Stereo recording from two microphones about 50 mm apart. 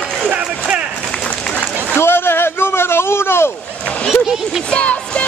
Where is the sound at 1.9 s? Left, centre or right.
Left.